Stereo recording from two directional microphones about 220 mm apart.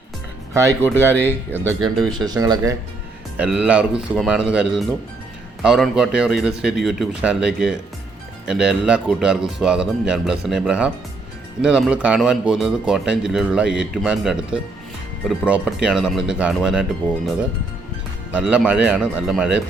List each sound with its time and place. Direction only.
0.5 s speech: 15° right (ahead or behind)
3.3 s speech: 5° right (ahead or behind)
18.3 s speech: 5° right (ahead or behind)